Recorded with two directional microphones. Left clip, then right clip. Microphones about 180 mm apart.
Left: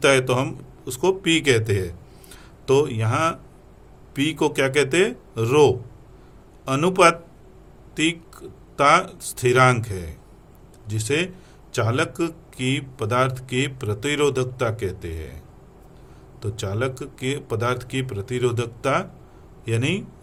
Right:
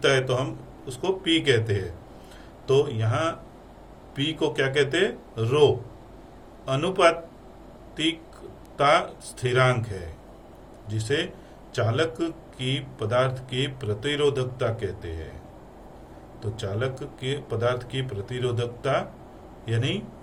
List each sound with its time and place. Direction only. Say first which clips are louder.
0.0 s speech: left 4 dB; 70° left (ahead or behind)
16.4 s speech: left 3 dB; 70° left (ahead or behind)